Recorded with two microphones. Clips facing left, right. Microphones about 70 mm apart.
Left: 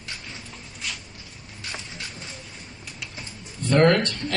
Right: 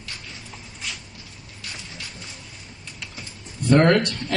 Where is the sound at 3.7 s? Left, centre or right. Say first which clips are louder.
Right 1 dB; centre.